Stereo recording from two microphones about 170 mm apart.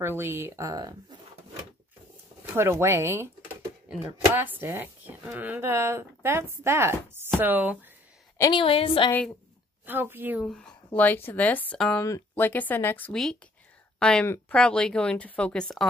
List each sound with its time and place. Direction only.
0.0 s speech: 15° right (ahead or behind)
2.4 s speech: 15° right (ahead or behind)
8.4 s a woman's voice: 25° left (ahead or behind)
9.8 s speech: 10° right (ahead or behind)
10.4 s a woman's voice: 5° left (ahead or behind)